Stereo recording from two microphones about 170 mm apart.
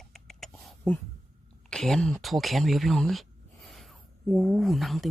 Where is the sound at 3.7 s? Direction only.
Centre (ahead or behind).